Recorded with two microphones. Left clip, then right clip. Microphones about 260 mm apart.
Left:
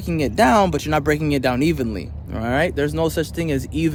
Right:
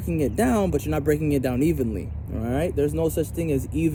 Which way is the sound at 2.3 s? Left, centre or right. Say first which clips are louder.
Left 6 dB; left.